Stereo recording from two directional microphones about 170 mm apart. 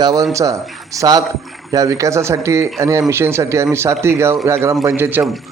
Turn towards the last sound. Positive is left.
turn(degrees=-10)  # may be behind; listen again after turning